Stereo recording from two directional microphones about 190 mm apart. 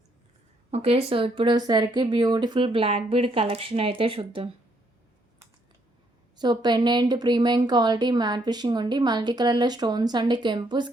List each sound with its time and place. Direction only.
0.7 s speech: 30° right (ahead or behind)
6.3 s speech: 20° right (ahead or behind)